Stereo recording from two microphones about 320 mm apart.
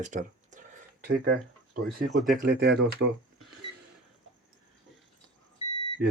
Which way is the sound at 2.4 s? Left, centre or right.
Right.